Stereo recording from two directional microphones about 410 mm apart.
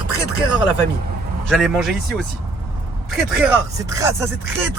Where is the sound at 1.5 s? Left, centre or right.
Centre.